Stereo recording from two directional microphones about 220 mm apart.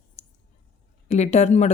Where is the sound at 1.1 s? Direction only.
30° left (ahead or behind).